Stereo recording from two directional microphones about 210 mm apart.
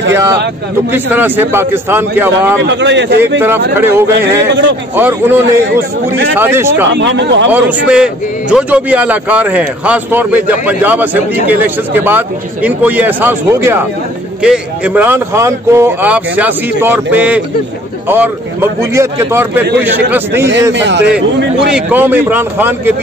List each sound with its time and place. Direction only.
0.1 s a man's voice: 15° right (ahead or behind)
2.6 s a man's voice: 55° right (ahead or behind)
3.7 s a man's voice: 10° right (ahead or behind)
7.0 s a man's voice: 55° right (ahead or behind)
7.5 s a man's voice: 5° right (ahead or behind)
20.7 s a man's voice: 55° right (ahead or behind)
21.6 s a man's voice: 5° right (ahead or behind)